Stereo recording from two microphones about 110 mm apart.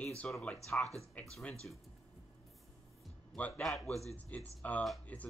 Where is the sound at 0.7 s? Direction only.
10° left (ahead or behind).